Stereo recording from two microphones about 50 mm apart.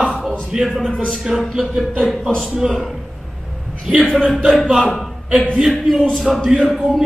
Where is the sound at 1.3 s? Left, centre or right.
Centre.